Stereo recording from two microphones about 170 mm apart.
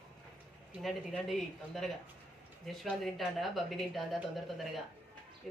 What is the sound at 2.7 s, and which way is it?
Speech, centre (ahead or behind).